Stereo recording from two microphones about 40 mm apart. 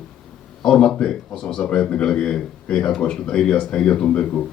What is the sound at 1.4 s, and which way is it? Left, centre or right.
Speech, centre.